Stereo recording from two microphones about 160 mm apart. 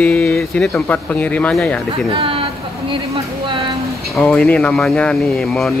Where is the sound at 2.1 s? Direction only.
35° right (ahead or behind).